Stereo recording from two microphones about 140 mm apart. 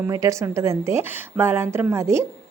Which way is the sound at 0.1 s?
25° right (ahead or behind).